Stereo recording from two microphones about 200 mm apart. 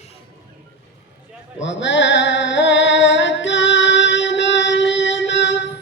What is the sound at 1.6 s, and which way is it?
Music, 65° left (ahead or behind).